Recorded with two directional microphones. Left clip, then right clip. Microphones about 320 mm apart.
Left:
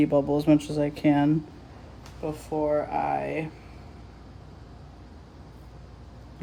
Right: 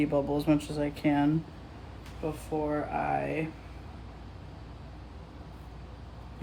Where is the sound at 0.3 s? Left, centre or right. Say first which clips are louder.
Left 6 dB; left.